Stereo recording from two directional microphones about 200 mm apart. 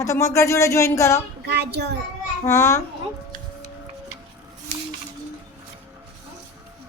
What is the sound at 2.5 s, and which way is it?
Speech, 15° left (ahead or behind).